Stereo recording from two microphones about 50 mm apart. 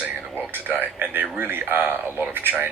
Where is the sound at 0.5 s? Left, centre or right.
Right.